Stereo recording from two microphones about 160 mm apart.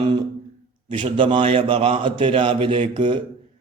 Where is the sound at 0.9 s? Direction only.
30° right (ahead or behind).